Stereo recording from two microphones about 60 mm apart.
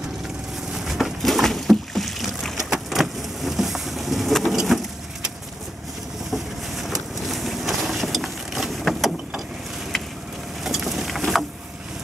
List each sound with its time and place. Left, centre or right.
0.7 s boat: centre
6.3 s vehicle: centre
10.6 s boat: centre